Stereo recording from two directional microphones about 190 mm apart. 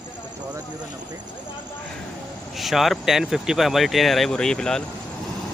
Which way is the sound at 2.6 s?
Centre (ahead or behind).